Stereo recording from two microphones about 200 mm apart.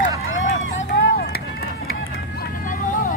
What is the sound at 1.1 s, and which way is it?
Run, 50° left (ahead or behind).